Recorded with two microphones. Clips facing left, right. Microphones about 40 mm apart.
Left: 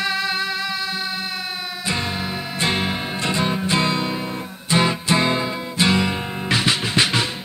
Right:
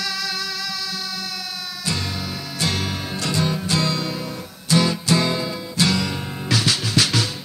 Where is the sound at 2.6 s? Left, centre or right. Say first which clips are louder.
Left 3 dB; left.